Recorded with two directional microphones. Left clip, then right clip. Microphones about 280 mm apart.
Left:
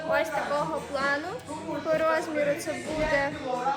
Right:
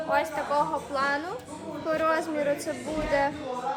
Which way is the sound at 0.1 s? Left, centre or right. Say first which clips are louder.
Even; centre.